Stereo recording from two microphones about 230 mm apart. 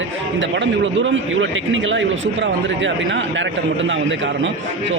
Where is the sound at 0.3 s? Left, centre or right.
Right.